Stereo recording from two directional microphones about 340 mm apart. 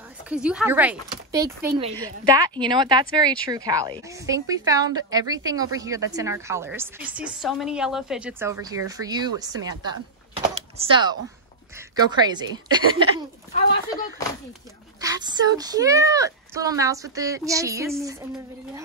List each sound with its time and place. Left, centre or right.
0.3 s a woman's voice: centre
13.5 s speech: left
15.0 s a woman's voice: centre